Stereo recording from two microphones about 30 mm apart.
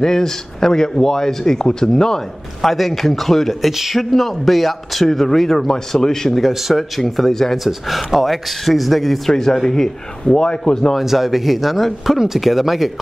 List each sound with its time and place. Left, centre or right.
0.0 s speech: centre
2.6 s a man's voice: centre
5.9 s speech: centre
6.4 s a man's voice: centre
7.0 s speech: centre
7.5 s a man's voice: centre
9.4 s speech: centre
10.2 s speech: left
11.0 s a man's voice: centre